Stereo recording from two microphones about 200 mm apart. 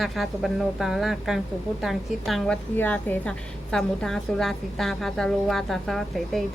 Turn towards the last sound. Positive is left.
turn(degrees=0)  # may be behind; listen again after turning